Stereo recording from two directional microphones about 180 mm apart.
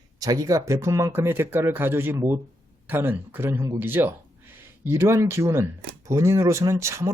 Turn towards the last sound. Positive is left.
turn(degrees=-15)  # may be behind; listen again after turning